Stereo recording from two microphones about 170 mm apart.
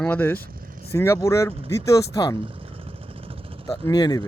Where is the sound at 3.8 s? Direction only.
20° left (ahead or behind).